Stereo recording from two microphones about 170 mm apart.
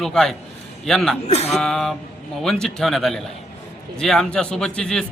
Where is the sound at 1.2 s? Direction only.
40° left (ahead or behind).